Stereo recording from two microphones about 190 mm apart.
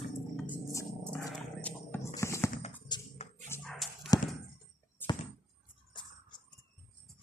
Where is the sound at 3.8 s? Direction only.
Centre (ahead or behind).